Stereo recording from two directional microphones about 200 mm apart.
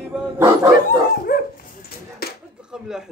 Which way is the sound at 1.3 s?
50° left (ahead or behind).